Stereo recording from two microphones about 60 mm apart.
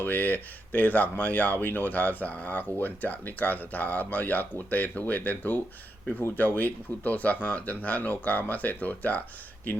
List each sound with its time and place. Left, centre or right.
0.0 s speech: left
6.6 s speech: left